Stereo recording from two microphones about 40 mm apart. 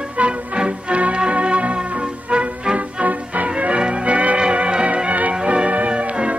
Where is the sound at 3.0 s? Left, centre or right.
Right.